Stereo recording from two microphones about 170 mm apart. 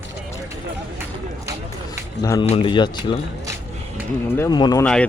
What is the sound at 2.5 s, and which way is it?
Speech, 30° left (ahead or behind).